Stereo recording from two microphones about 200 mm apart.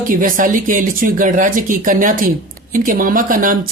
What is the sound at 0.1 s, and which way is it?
Speech, 45° right (ahead or behind).